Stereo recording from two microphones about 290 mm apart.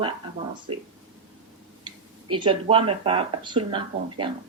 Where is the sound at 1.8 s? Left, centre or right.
Centre.